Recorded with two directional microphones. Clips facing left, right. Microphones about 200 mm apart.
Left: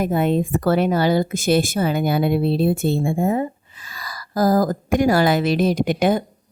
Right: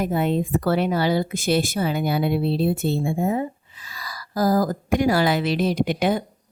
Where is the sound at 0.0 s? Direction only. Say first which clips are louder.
Left 3 dB; 50° left (ahead or behind).